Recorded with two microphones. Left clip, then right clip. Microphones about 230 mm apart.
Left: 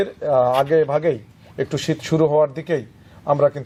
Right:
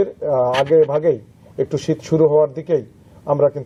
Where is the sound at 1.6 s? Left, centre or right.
Centre.